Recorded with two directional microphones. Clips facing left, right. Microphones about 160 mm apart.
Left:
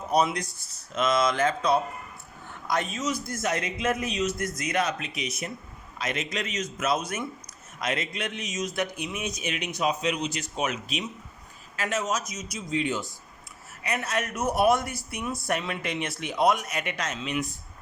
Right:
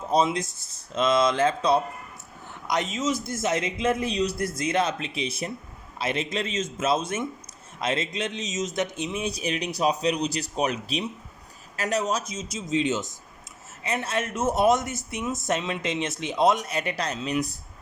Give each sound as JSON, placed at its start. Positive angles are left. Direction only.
{"t": 0.1, "sound": "speech", "side_deg": -25}